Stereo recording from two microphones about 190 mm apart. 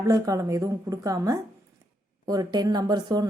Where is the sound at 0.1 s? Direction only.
15° right (ahead or behind).